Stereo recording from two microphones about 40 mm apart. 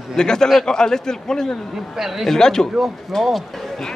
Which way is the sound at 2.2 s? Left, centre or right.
Centre.